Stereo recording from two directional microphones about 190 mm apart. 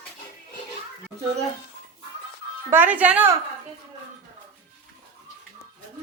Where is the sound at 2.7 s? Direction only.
10° right (ahead or behind).